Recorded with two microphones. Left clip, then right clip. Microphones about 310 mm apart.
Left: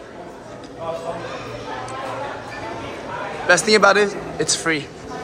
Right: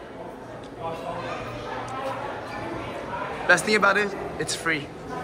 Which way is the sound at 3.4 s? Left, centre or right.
Centre.